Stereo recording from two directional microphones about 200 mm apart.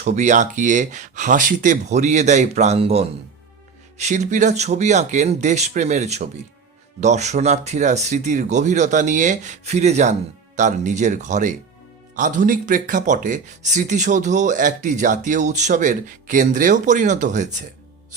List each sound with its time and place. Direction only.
0.0 s speech: 35° right (ahead or behind)